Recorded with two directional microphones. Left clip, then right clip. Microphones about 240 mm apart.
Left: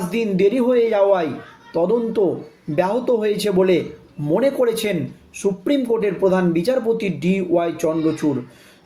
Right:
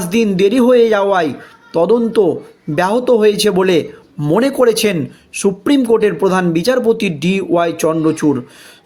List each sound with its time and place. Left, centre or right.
0.1 s a man's voice: right